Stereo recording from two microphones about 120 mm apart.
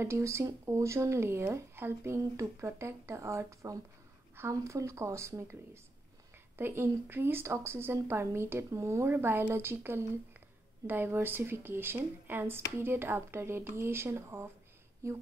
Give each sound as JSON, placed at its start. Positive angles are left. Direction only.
{"t": 0.0, "sound": "speech", "side_deg": -20}
{"t": 6.6, "sound": "speech", "side_deg": -20}